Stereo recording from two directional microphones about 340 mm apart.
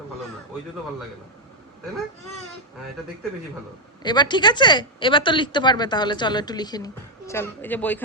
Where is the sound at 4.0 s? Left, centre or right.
Centre.